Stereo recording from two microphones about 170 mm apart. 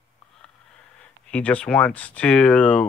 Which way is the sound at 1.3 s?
10° left (ahead or behind).